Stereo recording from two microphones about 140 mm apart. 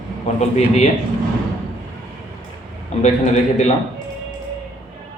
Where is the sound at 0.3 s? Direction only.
55° left (ahead or behind).